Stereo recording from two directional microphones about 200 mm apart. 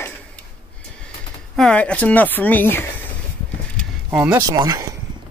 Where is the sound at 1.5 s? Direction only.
5° left (ahead or behind).